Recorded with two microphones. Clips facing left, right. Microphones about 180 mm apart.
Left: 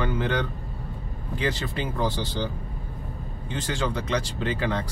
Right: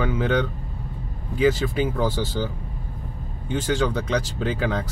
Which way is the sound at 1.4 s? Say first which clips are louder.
Right 8 dB; 10° right (ahead or behind).